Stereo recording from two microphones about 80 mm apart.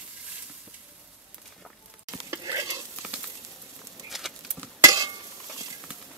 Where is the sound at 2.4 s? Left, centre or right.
Right.